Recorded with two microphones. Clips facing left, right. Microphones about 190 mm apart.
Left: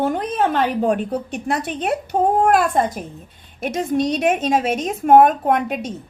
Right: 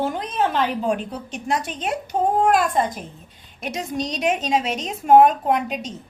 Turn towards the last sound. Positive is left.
turn(degrees=55)  # may be behind; listen again after turning